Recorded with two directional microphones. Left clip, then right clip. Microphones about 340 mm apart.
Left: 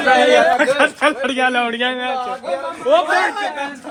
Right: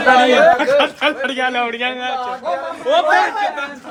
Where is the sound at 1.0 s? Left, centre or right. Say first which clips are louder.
Left 1 dB; left.